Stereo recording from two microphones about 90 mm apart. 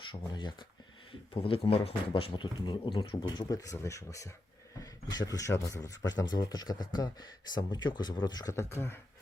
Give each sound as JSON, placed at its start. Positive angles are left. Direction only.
{"t": 0.1, "sound": "speech", "side_deg": 60}
{"t": 1.3, "sound": "a man's voice", "side_deg": 90}
{"t": 6.1, "sound": "speech", "side_deg": 50}
{"t": 8.5, "sound": "speech", "side_deg": 25}